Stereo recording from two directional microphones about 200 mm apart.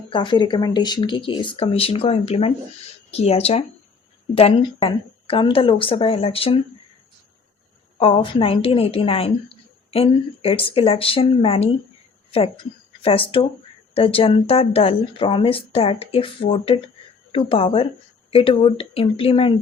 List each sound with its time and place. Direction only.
0.1 s speech: 25° left (ahead or behind)
7.9 s speech: 25° left (ahead or behind)